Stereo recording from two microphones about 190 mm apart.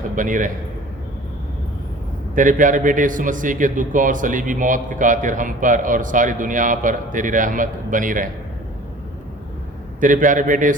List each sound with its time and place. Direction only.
0.2 s a man's voice: 45° right (ahead or behind)
2.3 s a man's voice: 45° right (ahead or behind)
10.0 s a man's voice: 45° right (ahead or behind)